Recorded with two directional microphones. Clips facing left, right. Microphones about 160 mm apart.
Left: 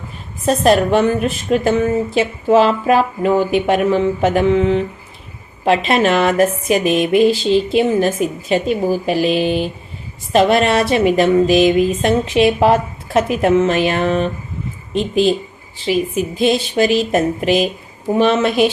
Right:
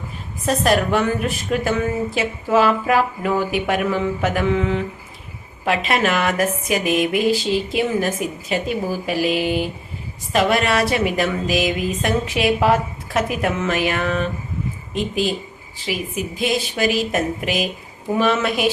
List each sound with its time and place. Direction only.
0.4 s a woman's voice: 25° left (ahead or behind)
16.4 s a woman's voice: 30° left (ahead or behind)